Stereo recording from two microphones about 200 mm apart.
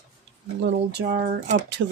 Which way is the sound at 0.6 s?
55° right (ahead or behind).